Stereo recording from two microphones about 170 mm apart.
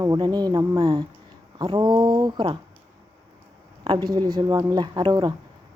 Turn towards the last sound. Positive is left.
turn(degrees=-25)  # may be behind; listen again after turning